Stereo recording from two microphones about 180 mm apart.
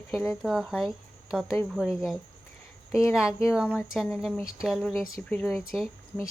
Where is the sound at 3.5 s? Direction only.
5° right (ahead or behind).